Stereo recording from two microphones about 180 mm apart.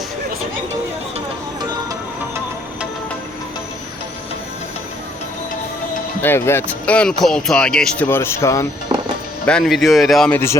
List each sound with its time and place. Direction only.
6.2 s speech: 15° left (ahead or behind)
9.5 s speech: centre (ahead or behind)